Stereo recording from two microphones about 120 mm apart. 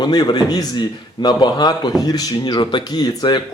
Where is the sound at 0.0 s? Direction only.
35° left (ahead or behind).